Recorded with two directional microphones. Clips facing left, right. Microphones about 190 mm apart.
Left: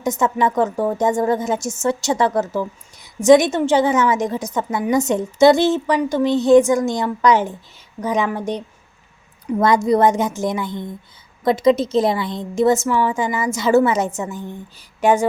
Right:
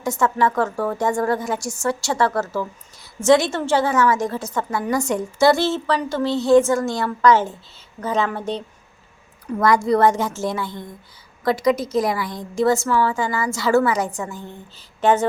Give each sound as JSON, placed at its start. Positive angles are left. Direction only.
{"t": 0.0, "sound": "a woman's voice", "side_deg": 20}